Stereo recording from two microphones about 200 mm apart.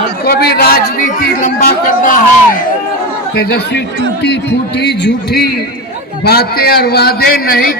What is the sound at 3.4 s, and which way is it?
A man's voice, 55° left (ahead or behind).